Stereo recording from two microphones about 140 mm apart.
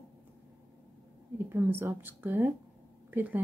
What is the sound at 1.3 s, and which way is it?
Speech, 15° right (ahead or behind).